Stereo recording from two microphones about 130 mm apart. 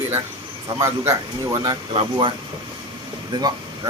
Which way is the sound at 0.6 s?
25° right (ahead or behind).